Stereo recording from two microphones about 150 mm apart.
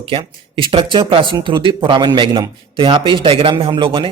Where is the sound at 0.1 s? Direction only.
35° right (ahead or behind).